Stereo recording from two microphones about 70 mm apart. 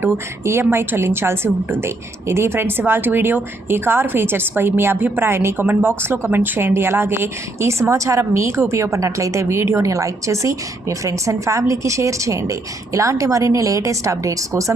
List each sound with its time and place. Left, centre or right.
0.0 s speech: right